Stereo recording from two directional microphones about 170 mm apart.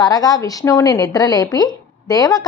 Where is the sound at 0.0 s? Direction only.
20° left (ahead or behind).